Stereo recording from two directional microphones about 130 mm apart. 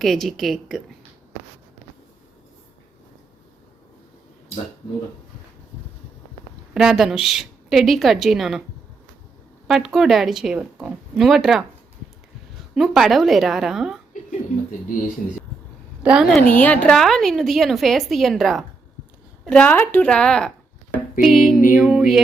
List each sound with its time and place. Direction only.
0.0 s a woman's voice: centre (ahead or behind)
6.7 s a woman's voice: 5° right (ahead or behind)
9.6 s a woman's voice: centre (ahead or behind)
12.7 s a woman's voice: 5° right (ahead or behind)
16.0 s a woman's voice: 5° right (ahead or behind)
16.6 s a woman's voice: 10° left (ahead or behind)